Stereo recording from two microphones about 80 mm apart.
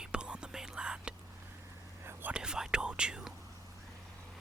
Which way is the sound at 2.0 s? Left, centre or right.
Right.